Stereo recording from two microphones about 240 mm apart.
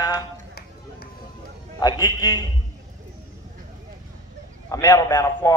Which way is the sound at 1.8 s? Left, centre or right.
Centre.